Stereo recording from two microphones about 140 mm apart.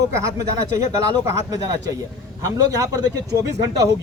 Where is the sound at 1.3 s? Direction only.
25° right (ahead or behind).